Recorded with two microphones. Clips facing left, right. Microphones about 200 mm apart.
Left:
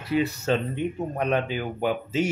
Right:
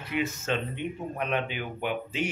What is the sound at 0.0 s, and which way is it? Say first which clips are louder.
Speech: left 6 dB; 35° left (ahead or behind).